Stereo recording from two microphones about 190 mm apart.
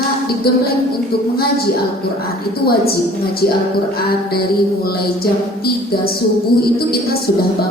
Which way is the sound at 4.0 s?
55° left (ahead or behind).